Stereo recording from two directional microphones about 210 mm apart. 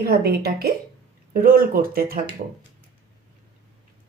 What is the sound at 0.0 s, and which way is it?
Speech, 50° right (ahead or behind).